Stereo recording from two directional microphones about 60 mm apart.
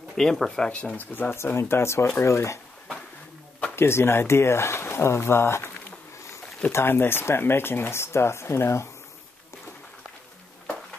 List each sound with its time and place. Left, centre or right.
0.2 s speech: centre
0.7 s speech: left
1.3 s speech: left
3.7 s speech: left
6.7 s speech: left